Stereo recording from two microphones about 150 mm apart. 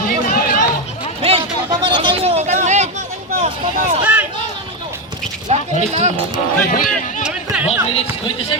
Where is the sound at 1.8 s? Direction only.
35° right (ahead or behind); by 2.9 s 50° right (ahead or behind).